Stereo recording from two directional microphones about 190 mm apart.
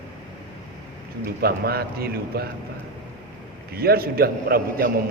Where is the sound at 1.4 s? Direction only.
55° right (ahead or behind).